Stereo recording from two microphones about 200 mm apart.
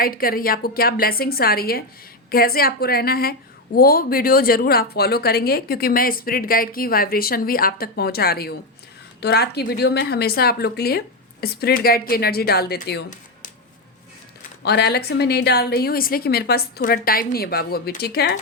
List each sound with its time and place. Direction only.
0.0 s a woman's voice: 45° left (ahead or behind)
14.6 s a woman's voice: 55° left (ahead or behind)